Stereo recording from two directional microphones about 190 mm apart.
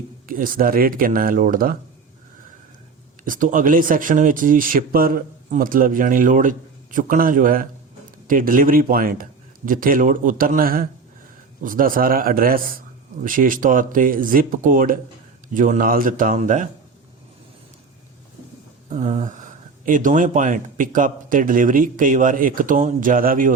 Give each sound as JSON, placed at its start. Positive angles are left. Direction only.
{"t": 0.3, "sound": "speech", "side_deg": -45}
{"t": 3.2, "sound": "speech", "side_deg": -45}
{"t": 18.9, "sound": "a sound", "side_deg": -40}
{"t": 19.8, "sound": "speech", "side_deg": -45}